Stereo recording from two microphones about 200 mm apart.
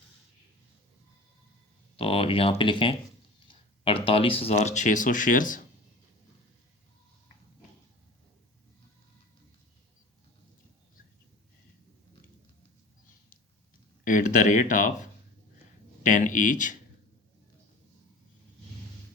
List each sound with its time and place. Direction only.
2.0 s speech: 30° left (ahead or behind)
14.0 s speech: 40° left (ahead or behind)
16.0 s speech: 40° left (ahead or behind)